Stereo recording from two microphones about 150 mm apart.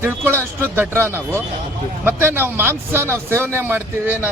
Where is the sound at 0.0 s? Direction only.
15° right (ahead or behind).